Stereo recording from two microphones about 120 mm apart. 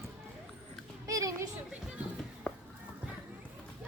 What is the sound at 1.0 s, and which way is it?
Speech, 25° right (ahead or behind).